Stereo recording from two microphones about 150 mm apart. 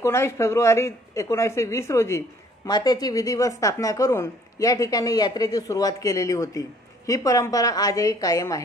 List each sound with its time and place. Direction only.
0.0 s speech: 20° left (ahead or behind)